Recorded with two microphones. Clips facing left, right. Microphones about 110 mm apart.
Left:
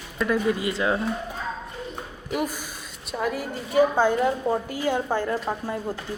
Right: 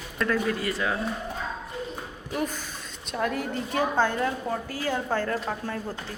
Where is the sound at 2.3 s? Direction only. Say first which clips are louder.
Left 2 dB; 10° left (ahead or behind).